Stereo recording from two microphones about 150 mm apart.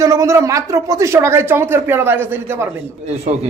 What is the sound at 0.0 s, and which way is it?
Speech, 20° right (ahead or behind).